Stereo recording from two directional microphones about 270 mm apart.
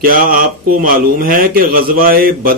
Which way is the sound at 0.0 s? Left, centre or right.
Right.